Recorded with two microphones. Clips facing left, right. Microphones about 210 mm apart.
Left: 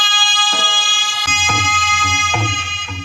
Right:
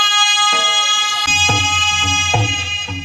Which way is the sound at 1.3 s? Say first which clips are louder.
Right 1 dB; 35° right (ahead or behind).